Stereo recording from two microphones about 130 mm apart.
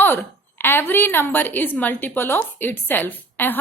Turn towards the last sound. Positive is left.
turn(degrees=15)  # may be behind; listen again after turning